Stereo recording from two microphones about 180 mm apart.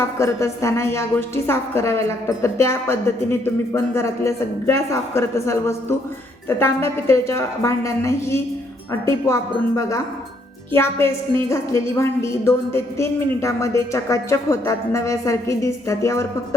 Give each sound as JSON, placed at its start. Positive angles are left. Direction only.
{"t": 0.0, "sound": "a woman's voice", "side_deg": 15}